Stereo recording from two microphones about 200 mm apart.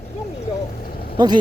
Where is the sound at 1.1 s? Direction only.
20° right (ahead or behind).